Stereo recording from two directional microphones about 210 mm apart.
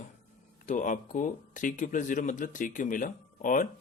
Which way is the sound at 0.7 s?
35° left (ahead or behind).